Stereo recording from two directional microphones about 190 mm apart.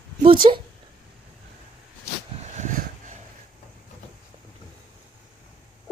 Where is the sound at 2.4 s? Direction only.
40° right (ahead or behind).